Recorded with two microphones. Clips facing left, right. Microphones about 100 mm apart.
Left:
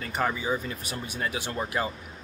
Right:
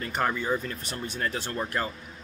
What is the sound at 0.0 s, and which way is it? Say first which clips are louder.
Speech: even; centre (ahead or behind).